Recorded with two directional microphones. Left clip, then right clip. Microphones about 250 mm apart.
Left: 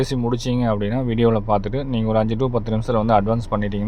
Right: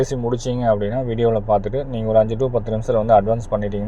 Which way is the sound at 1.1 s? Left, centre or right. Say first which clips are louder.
Right 1 dB; centre.